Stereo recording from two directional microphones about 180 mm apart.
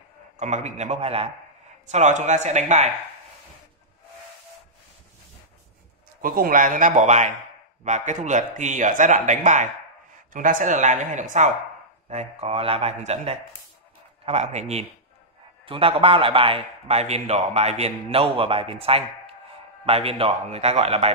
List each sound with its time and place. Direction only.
0.4 s a man's voice: 40° right (ahead or behind)
6.2 s a man's voice: 50° right (ahead or behind)